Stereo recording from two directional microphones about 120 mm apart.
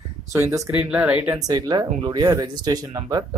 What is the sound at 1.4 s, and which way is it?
Speech, 35° right (ahead or behind).